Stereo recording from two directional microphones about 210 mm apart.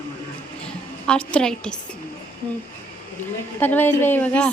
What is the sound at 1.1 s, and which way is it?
Speech, 5° left (ahead or behind).